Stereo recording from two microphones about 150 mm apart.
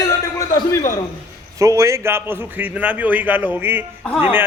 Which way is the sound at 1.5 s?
20° right (ahead or behind).